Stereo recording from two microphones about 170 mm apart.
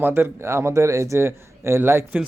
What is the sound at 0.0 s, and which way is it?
A man's voice, 15° right (ahead or behind).